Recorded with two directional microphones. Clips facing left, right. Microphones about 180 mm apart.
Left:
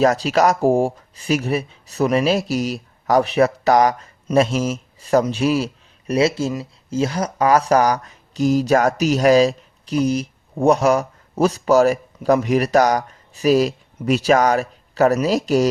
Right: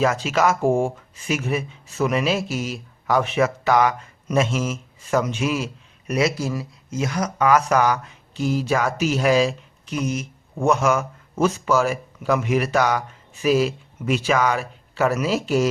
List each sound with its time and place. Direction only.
0.0 s speech: 40° left (ahead or behind)